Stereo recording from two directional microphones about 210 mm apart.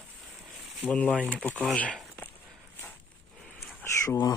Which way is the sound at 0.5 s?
Centre (ahead or behind).